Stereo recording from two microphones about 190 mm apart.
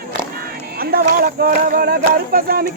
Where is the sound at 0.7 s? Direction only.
50° right (ahead or behind).